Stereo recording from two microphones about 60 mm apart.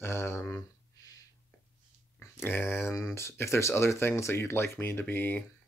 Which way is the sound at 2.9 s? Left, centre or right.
Left.